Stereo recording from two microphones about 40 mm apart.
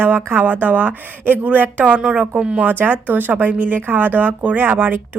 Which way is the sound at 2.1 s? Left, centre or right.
Right.